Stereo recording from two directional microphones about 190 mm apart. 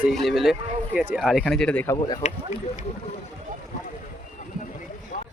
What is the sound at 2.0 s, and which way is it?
Speech, 25° left (ahead or behind).